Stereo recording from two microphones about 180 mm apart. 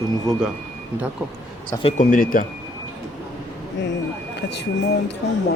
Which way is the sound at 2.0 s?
45° left (ahead or behind).